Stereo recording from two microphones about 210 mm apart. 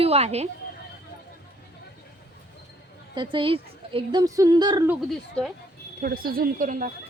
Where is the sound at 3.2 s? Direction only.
25° right (ahead or behind).